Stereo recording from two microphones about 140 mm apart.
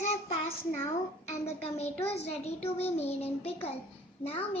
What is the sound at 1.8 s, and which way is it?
A child's voice, 45° left (ahead or behind).